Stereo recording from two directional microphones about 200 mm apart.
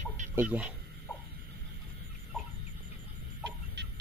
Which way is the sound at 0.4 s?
5° right (ahead or behind).